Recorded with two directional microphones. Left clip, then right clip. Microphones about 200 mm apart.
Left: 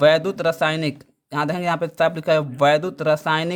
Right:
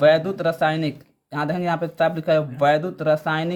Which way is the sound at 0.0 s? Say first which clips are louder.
Left 1 dB; 35° left (ahead or behind).